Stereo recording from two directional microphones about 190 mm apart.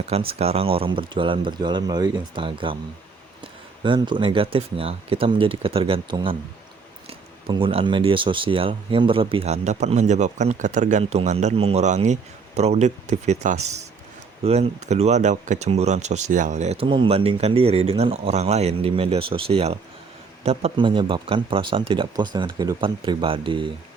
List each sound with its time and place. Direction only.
0.0 s speech: 30° right (ahead or behind)
3.8 s speech: 25° right (ahead or behind)